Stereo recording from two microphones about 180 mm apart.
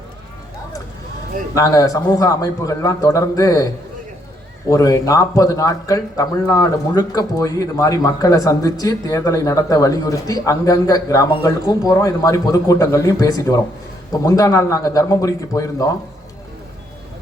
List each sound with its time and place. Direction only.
1.5 s a man's voice: 20° left (ahead or behind)
4.7 s a man's voice: 20° left (ahead or behind)